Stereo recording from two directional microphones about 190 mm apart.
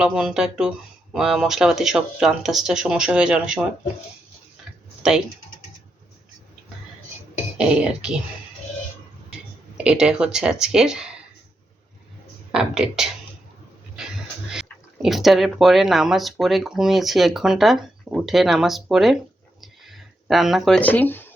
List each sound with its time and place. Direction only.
0.0 s speech: 5° right (ahead or behind)
5.0 s speech: 5° right (ahead or behind)
7.6 s speech: 5° right (ahead or behind)
9.3 s speech: 5° right (ahead or behind)
12.5 s speech: 5° right (ahead or behind)
14.5 s speech: centre (ahead or behind)
19.6 s a sound: centre (ahead or behind)